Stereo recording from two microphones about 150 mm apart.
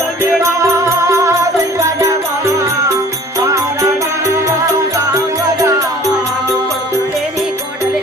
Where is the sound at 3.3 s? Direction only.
20° right (ahead or behind).